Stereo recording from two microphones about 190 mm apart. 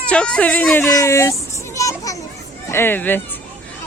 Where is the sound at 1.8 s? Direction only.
15° left (ahead or behind).